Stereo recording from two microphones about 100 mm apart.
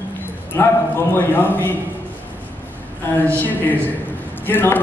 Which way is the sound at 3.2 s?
20° left (ahead or behind).